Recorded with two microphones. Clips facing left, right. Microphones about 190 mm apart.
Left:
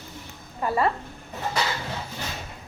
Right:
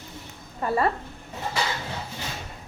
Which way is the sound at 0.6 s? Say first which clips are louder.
Even; 30° right (ahead or behind).